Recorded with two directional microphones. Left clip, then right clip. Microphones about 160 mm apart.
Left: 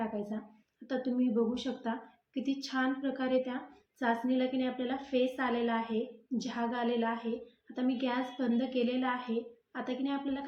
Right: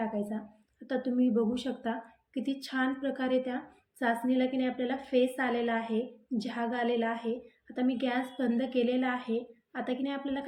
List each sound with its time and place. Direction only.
0.0 s a woman's voice: 45° right (ahead or behind)